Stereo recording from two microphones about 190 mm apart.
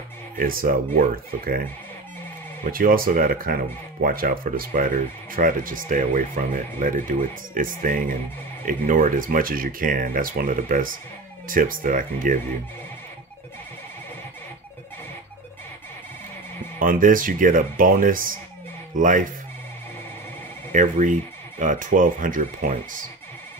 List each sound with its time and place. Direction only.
0.4 s speech: 50° right (ahead or behind)
2.6 s speech: 50° right (ahead or behind)
16.8 s speech: 45° right (ahead or behind)
20.7 s speech: 40° right (ahead or behind)